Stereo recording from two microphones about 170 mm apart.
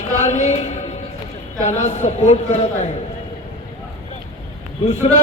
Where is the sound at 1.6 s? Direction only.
45° left (ahead or behind).